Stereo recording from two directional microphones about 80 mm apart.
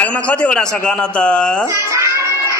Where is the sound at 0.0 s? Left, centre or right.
Centre.